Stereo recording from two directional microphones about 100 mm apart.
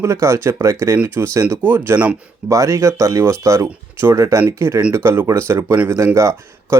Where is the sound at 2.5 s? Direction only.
30° right (ahead or behind).